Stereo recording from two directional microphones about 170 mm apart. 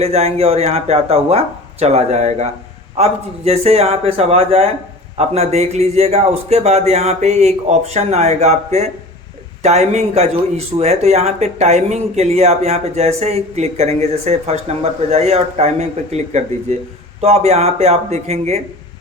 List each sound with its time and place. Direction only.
0.0 s speech: 40° right (ahead or behind)